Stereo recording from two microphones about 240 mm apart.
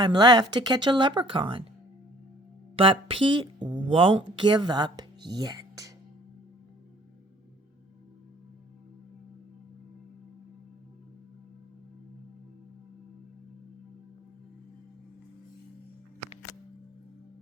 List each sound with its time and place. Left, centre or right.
0.0 s speech: centre
2.7 s speech: right